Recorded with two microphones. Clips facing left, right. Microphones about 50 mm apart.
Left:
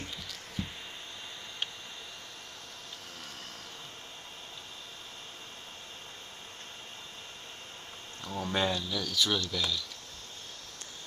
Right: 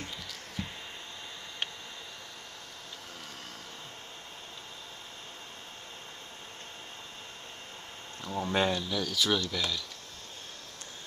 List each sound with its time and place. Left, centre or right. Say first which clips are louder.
8.3 s speech: right 2 dB; centre
9.0 s speech: right 1 dB; centre